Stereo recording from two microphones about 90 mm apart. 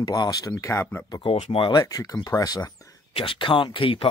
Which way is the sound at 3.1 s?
75° left (ahead or behind).